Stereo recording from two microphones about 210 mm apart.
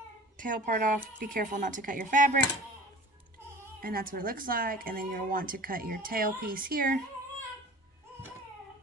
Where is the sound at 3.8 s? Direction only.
45° right (ahead or behind).